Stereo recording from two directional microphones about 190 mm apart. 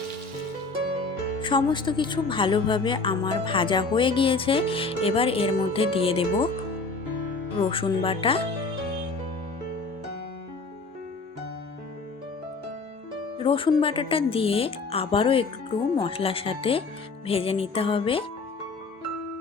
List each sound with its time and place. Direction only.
1.4 s a woman's voice: 25° left (ahead or behind)
7.7 s a woman's voice: 30° left (ahead or behind)
13.4 s a woman's voice: 25° left (ahead or behind)